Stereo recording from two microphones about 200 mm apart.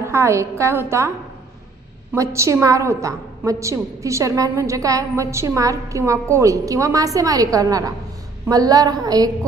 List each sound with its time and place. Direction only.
0.0 s a woman's voice: 15° right (ahead or behind)
2.1 s a woman's voice: 15° right (ahead or behind)